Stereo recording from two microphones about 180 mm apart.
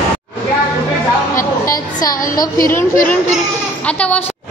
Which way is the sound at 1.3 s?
50° left (ahead or behind).